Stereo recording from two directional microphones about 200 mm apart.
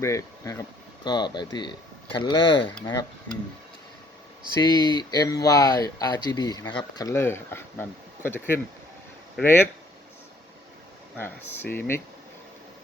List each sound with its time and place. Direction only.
0.0 s speech: 15° left (ahead or behind)
4.6 s speech: 20° left (ahead or behind)
11.2 s speech: 10° left (ahead or behind)